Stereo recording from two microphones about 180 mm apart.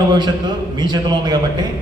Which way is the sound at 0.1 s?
25° right (ahead or behind).